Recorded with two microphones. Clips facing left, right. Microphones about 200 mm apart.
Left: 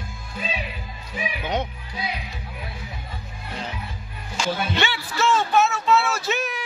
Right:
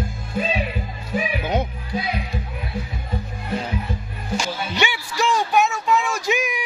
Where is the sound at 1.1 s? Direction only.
45° right (ahead or behind).